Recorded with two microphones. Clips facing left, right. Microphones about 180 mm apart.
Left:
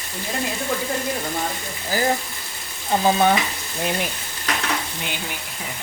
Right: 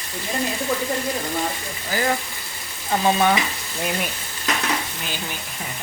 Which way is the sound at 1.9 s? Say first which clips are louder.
Left 1 dB; 30° left (ahead or behind).